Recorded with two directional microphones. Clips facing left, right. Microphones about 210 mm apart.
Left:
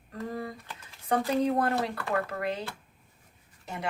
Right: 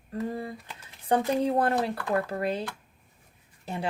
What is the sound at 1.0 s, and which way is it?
Speech, 30° right (ahead or behind).